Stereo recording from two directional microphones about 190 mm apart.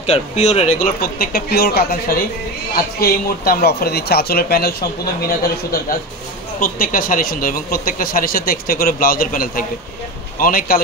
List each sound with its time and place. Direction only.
0.0 s speech: 35° left (ahead or behind); by 10.8 s 50° left (ahead or behind)